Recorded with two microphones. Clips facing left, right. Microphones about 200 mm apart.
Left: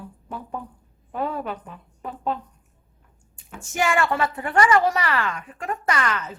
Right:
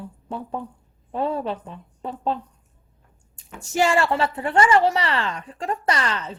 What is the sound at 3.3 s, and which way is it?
A woman's voice, 35° right (ahead or behind).